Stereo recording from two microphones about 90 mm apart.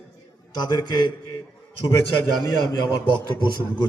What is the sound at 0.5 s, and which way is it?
Speech, 50° left (ahead or behind).